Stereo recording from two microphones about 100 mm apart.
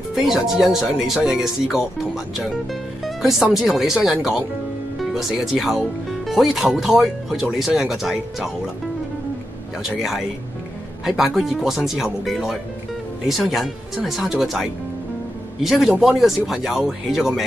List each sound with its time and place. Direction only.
0.1 s speech: 5° right (ahead or behind)
9.8 s speech: 5° right (ahead or behind)